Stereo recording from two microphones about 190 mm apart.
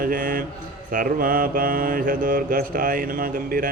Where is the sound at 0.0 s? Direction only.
45° right (ahead or behind).